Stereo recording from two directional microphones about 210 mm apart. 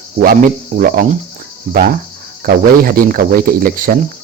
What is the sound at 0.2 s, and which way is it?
Speech, 40° right (ahead or behind).